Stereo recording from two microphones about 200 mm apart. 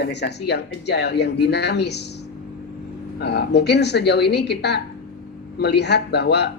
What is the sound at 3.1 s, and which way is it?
Speech, 55° left (ahead or behind).